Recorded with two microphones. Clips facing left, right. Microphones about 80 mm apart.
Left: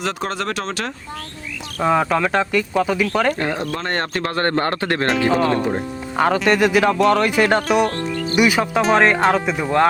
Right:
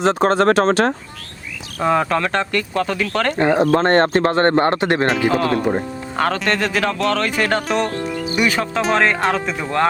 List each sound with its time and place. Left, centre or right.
0.0 s speech: right
1.8 s speech: centre
3.3 s speech: right
3.8 s speech: right
5.3 s speech: centre
7.9 s music: centre
8.4 s speech: centre